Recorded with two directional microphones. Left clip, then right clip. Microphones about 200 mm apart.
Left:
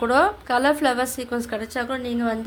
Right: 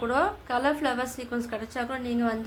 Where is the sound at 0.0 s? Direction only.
40° left (ahead or behind).